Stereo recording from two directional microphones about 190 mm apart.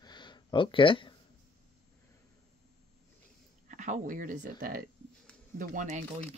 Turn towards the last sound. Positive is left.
turn(degrees=-40)  # may be behind; listen again after turning